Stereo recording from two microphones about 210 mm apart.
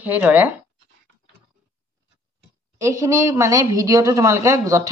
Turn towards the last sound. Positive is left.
turn(degrees=-15)  # may be behind; listen again after turning